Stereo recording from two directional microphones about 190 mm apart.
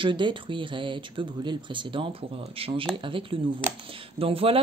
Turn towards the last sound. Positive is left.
turn(degrees=-30)  # may be behind; listen again after turning